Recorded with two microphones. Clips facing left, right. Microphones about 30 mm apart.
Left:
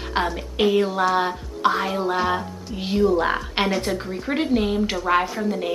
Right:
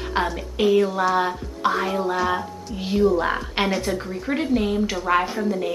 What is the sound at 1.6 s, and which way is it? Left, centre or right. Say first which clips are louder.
Music: left 2 dB; left.